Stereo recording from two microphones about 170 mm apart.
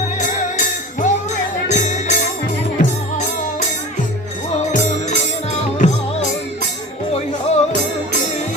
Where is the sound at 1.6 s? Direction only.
45° left (ahead or behind).